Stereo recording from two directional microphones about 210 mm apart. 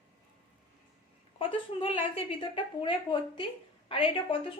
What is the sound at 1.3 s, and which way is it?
A woman's voice, 25° left (ahead or behind).